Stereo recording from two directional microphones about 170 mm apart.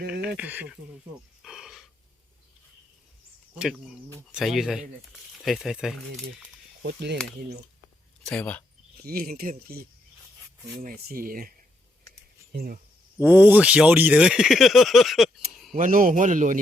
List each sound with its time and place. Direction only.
0.3 s speech: 10° right (ahead or behind)
1.4 s a sound: centre (ahead or behind)
3.5 s speech: 5° right (ahead or behind)
6.8 s speech: 80° right
8.2 s speech: 5° left (ahead or behind)
9.0 s speech: 60° right (ahead or behind)
10.8 s speech: 55° right (ahead or behind)
12.5 s speech: 60° right (ahead or behind)
13.1 s speech: 10° right (ahead or behind)
15.7 s a man's voice: 55° right (ahead or behind)